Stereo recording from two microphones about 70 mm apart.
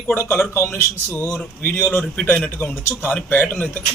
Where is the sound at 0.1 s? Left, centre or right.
Left.